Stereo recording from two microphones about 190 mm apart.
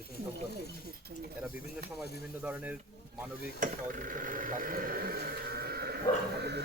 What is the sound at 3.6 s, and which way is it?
Speech, 45° right (ahead or behind).